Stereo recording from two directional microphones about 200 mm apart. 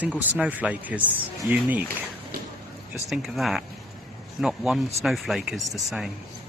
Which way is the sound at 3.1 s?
Centre (ahead or behind).